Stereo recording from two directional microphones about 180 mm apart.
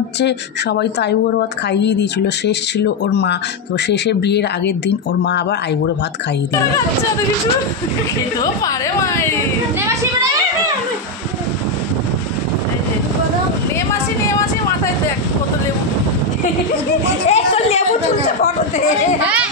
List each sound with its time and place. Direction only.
0.2 s speech: 70° left (ahead or behind)
8.4 s a woman's voice: 20° left (ahead or behind)
17.3 s chatter: 35° left (ahead or behind)